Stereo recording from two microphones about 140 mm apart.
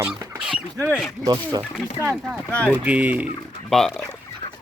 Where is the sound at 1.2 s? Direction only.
30° right (ahead or behind).